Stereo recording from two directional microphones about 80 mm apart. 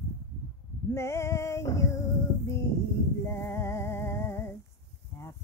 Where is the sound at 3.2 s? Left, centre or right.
Left.